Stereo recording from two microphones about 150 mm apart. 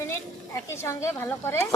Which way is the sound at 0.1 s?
15° left (ahead or behind).